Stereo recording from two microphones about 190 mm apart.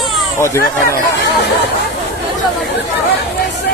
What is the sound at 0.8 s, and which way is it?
Speech, 50° left (ahead or behind).